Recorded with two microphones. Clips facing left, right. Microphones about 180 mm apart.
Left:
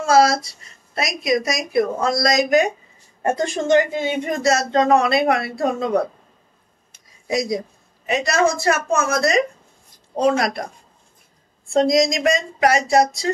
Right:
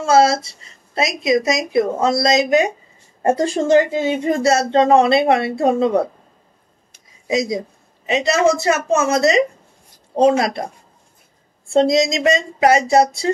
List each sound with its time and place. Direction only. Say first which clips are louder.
0.0 s speech: right 1 dB; 25° right (ahead or behind)
7.2 s speech: right 2 dB; 20° right (ahead or behind)
11.7 s speech: right 2 dB; 25° right (ahead or behind)